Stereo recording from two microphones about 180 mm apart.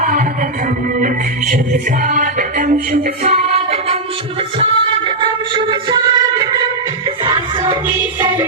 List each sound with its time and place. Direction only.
1.0 s music: 50° right (ahead or behind)
3.2 s music: 35° right (ahead or behind)
7.9 s music: 10° right (ahead or behind)